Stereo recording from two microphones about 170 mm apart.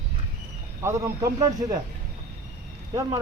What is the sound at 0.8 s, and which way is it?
A man's voice, 15° right (ahead or behind).